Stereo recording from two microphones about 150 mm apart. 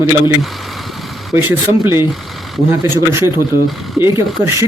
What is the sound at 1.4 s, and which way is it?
Speech, 15° right (ahead or behind).